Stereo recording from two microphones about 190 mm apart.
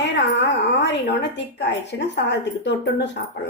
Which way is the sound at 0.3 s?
65° left (ahead or behind).